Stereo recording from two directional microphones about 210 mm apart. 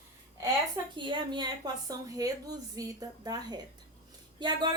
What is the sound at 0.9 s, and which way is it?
A woman's voice, 20° right (ahead or behind).